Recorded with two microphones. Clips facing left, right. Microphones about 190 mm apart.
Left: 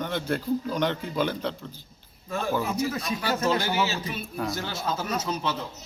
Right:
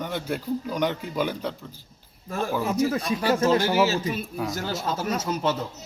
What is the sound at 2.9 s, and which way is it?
Speech, 30° right (ahead or behind).